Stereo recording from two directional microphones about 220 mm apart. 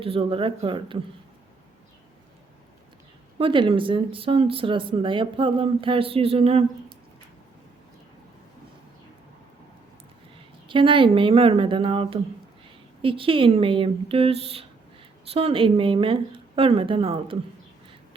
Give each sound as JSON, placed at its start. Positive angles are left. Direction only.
{"t": 0.0, "sound": "speech", "side_deg": -25}
{"t": 3.3, "sound": "speech", "side_deg": -25}
{"t": 10.7, "sound": "speech", "side_deg": -20}